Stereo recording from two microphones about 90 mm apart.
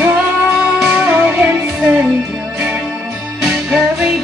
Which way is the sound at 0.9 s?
20° right (ahead or behind).